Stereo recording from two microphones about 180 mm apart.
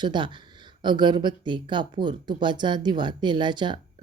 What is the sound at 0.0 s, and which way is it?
A woman's voice, 25° right (ahead or behind).